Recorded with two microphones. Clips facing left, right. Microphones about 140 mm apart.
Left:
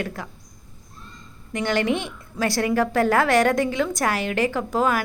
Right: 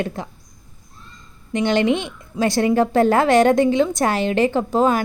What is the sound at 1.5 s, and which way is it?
A woman's voice, 20° right (ahead or behind).